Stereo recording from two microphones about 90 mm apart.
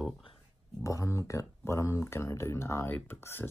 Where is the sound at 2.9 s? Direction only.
20° left (ahead or behind).